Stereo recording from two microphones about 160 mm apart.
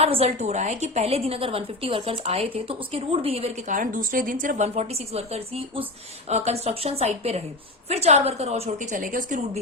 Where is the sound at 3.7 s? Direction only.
55° right (ahead or behind).